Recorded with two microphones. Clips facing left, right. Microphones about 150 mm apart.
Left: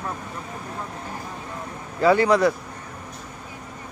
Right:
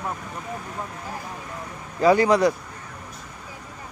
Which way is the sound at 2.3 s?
15° right (ahead or behind).